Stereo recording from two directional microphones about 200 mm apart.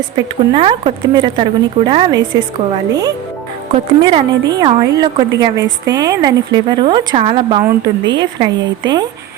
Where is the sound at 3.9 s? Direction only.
25° right (ahead or behind).